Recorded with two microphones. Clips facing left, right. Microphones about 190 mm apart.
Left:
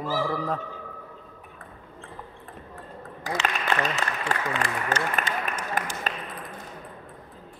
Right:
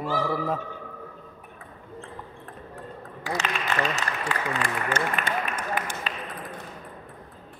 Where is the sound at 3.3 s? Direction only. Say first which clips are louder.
Left 1 dB; 45° left (ahead or behind).